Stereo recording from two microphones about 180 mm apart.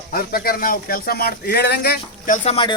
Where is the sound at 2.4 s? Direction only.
30° left (ahead or behind).